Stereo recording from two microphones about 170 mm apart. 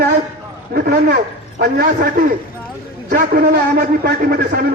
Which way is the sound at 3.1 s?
70° right (ahead or behind).